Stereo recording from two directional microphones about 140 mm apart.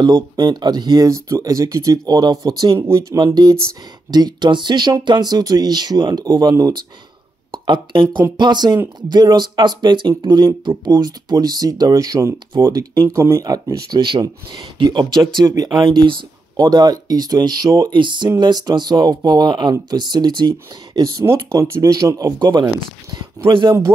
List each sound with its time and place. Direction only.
0.0 s speech: 30° right (ahead or behind)